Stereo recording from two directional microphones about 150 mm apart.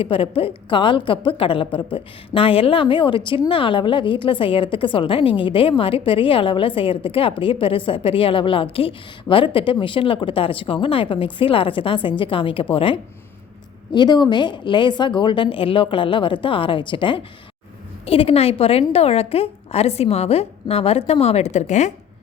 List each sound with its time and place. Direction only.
0.0 s a woman's voice: 40° left (ahead or behind)